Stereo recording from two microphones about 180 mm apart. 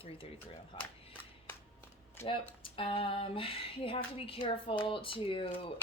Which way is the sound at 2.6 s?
30° left (ahead or behind).